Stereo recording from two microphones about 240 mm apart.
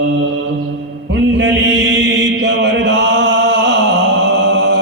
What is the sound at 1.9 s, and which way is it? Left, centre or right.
Chant, right.